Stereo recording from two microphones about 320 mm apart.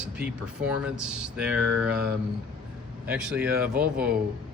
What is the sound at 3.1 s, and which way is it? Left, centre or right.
Speech, centre.